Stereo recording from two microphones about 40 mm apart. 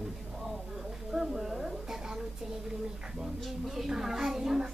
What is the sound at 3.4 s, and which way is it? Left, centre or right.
Music, centre.